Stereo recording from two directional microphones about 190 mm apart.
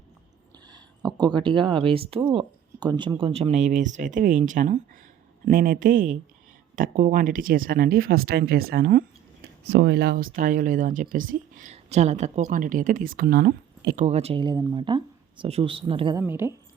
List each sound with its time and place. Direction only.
0.6 s speech: 20° right (ahead or behind); by 9.0 s 50° right (ahead or behind)
9.6 s speech: 65° right (ahead or behind)
14.0 s speech: 35° right (ahead or behind)
16.1 s a woman's voice: 15° right (ahead or behind)